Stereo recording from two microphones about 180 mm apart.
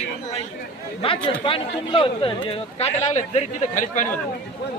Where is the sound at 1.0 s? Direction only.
30° left (ahead or behind); by 4.1 s 45° left (ahead or behind).